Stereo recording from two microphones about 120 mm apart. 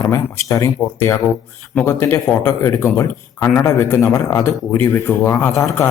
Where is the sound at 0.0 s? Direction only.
25° left (ahead or behind).